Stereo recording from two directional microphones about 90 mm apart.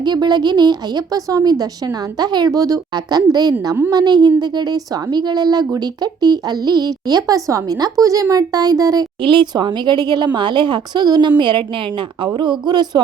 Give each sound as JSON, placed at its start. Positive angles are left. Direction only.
{"t": 0.0, "sound": "a woman's voice", "side_deg": -50}
{"t": 9.2, "sound": "a woman's voice", "side_deg": -65}